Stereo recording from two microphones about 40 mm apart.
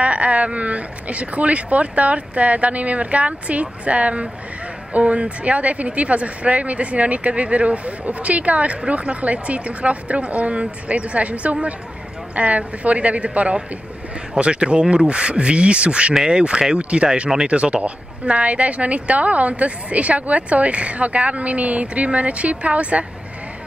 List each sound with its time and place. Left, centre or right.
0.0 s speech: right